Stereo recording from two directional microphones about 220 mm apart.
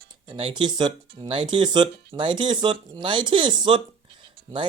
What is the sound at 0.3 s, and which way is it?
Speech, 25° right (ahead or behind).